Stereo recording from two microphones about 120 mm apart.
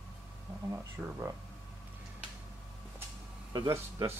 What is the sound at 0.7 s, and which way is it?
Speech, 20° right (ahead or behind).